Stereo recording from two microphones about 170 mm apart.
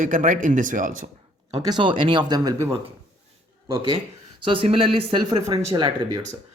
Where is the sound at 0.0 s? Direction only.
50° right (ahead or behind).